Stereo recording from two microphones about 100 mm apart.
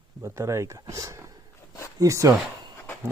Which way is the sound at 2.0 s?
35° right (ahead or behind).